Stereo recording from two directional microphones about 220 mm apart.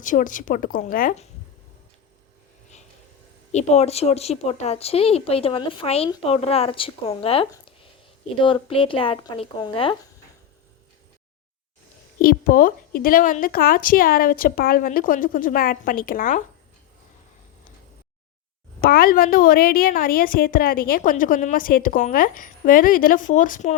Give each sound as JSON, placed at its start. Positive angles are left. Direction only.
{"t": 0.0, "sound": "a woman's voice", "side_deg": 35}
{"t": 3.5, "sound": "speech", "side_deg": 30}
{"t": 12.2, "sound": "a woman's voice", "side_deg": 40}
{"t": 18.8, "sound": "a woman's voice", "side_deg": 40}